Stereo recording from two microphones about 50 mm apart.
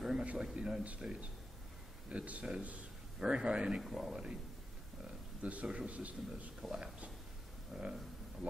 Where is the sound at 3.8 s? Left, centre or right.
Centre.